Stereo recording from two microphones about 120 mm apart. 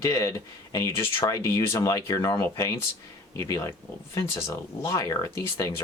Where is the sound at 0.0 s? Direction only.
25° left (ahead or behind).